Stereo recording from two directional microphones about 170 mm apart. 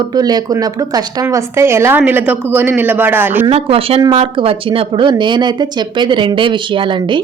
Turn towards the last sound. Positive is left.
turn(degrees=-30)  # may be behind; listen again after turning